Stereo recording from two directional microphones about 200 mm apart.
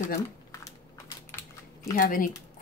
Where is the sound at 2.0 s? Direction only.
45° left (ahead or behind).